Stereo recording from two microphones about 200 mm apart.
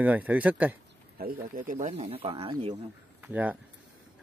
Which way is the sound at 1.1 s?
45° right (ahead or behind).